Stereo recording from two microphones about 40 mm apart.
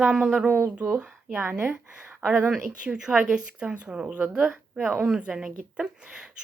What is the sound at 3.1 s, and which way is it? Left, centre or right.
A woman's voice, right.